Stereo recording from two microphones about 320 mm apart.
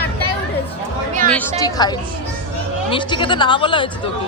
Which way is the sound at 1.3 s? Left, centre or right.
Centre.